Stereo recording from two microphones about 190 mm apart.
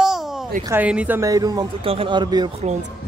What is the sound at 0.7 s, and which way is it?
Speech, 10° right (ahead or behind).